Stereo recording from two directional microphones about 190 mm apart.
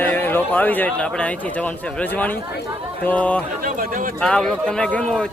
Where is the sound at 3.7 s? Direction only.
45° right (ahead or behind).